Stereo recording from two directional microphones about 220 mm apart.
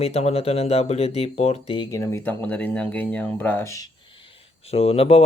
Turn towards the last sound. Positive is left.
turn(degrees=25)  # may be behind; listen again after turning